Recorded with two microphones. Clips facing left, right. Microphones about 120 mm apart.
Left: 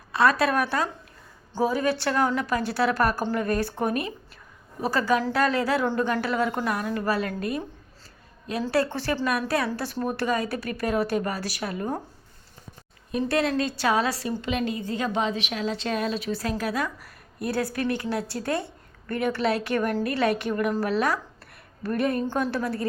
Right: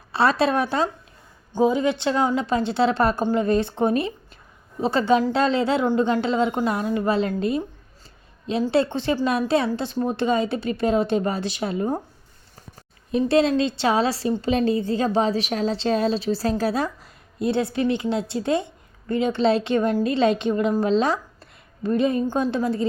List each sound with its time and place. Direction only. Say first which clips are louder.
0.1 s a woman's voice: right 2 dB; 30° right (ahead or behind)
8.6 s a woman's voice: right 4 dB; 20° right (ahead or behind)
13.1 s a woman's voice: right 6 dB; 25° right (ahead or behind)